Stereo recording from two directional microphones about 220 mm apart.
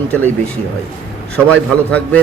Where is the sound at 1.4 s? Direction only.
5° left (ahead or behind).